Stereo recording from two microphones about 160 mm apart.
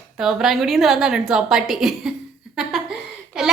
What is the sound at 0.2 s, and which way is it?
A woman's voice, 5° right (ahead or behind).